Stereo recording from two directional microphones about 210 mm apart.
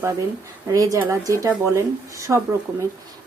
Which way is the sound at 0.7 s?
15° right (ahead or behind).